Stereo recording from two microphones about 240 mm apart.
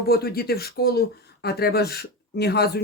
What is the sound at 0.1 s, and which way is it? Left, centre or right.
Speech, left.